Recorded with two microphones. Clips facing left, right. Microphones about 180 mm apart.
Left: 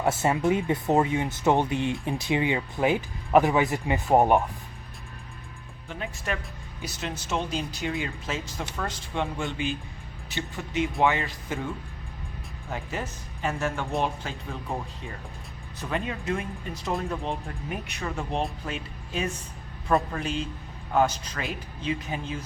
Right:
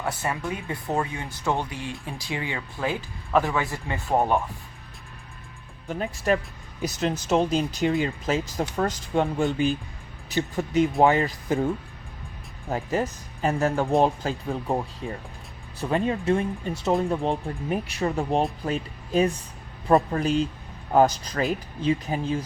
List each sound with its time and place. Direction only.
0.0 s speech: 25° left (ahead or behind)
5.9 s speech: 40° right (ahead or behind)
12.7 s speech: 35° right (ahead or behind)
15.8 s speech: 35° right (ahead or behind)